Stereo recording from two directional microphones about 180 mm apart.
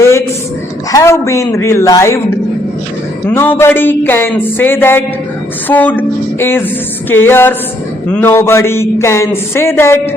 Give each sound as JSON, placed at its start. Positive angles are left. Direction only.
{"t": 0.0, "sound": "a sound", "side_deg": 15}
{"t": 0.9, "sound": "a man's voice", "side_deg": 15}
{"t": 3.2, "sound": "a man's voice", "side_deg": 10}